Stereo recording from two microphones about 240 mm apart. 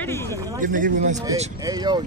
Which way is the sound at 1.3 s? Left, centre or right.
Centre.